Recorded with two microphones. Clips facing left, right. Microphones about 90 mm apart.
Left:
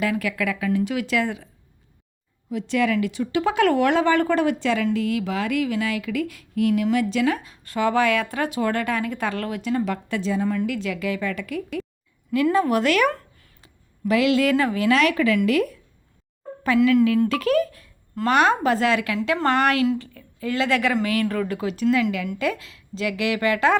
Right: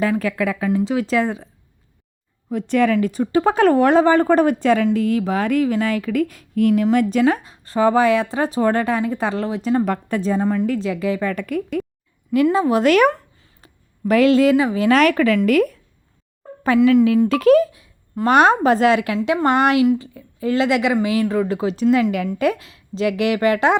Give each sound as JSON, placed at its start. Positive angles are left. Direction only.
{"t": 0.0, "sound": "speech", "side_deg": -35}
{"t": 2.5, "sound": "speech", "side_deg": -50}
{"t": 12.3, "sound": "a woman's voice", "side_deg": -30}
{"t": 12.8, "sound": "speech", "side_deg": -40}
{"t": 13.6, "sound": "a sound", "side_deg": -40}
{"t": 14.5, "sound": "speech", "side_deg": -15}
{"t": 14.8, "sound": "speech", "side_deg": -40}
{"t": 16.6, "sound": "speech", "side_deg": -30}
{"t": 17.7, "sound": "a sound", "side_deg": -15}
{"t": 18.3, "sound": "a woman's voice", "side_deg": -35}